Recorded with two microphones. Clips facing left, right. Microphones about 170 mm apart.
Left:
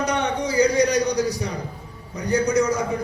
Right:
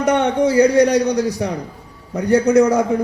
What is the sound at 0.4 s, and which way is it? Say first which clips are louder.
Speech: right 6 dB; 70° right (ahead or behind).